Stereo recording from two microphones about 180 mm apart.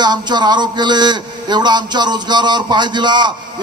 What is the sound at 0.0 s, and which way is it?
A man's voice, 25° right (ahead or behind).